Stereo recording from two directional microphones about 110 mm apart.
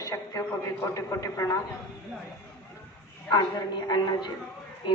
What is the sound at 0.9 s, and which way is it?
Speech, 30° left (ahead or behind).